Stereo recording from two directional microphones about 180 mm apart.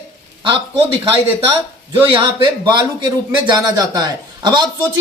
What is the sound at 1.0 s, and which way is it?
Speech, 30° right (ahead or behind).